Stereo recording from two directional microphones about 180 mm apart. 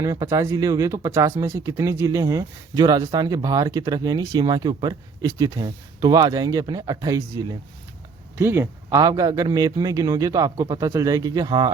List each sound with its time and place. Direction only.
0.0 s speech: 20° right (ahead or behind)